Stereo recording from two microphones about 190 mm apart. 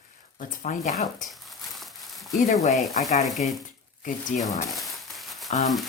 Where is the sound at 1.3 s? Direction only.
Centre (ahead or behind).